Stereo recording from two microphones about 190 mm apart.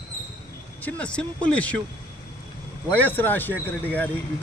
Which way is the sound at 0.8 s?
5° left (ahead or behind).